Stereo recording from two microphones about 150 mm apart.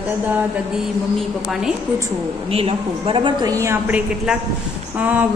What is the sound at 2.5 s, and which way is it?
A woman's voice, 40° right (ahead or behind).